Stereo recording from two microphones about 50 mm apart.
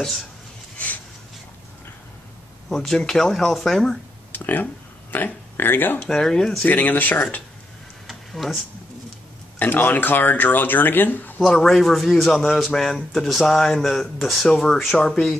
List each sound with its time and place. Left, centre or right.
0.7 s a sound: left
2.7 s speech: centre
4.3 s speech: left
6.0 s speech: centre
6.6 s speech: left
8.1 s a sound: centre
9.6 s speech: left
11.4 s speech: centre